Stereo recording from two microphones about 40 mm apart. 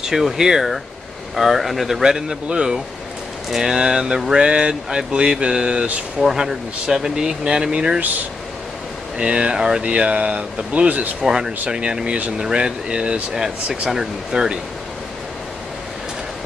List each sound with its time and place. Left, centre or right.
0.0 s speech: centre
3.4 s speech: centre
9.2 s speech: right
11.2 s speech: centre
13.3 s speech: centre